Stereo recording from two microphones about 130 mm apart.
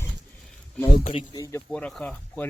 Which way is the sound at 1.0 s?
40° left (ahead or behind).